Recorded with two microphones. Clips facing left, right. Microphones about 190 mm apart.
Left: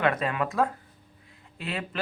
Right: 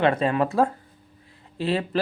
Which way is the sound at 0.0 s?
30° right (ahead or behind).